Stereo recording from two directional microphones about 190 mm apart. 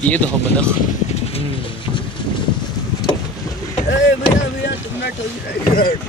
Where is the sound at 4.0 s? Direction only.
65° left (ahead or behind).